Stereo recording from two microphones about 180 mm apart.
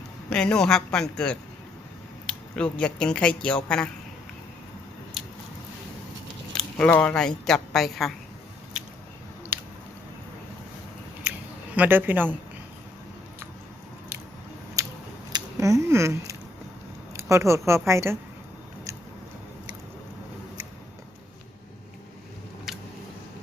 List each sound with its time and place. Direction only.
0.3 s a man's voice: 5° left (ahead or behind)
6.5 s speech: 5° left (ahead or behind)
11.3 s a sound: 10° right (ahead or behind)
14.8 s scissors: 20° right (ahead or behind)
17.2 s speech: 15° right (ahead or behind)
22.7 s a sound: centre (ahead or behind)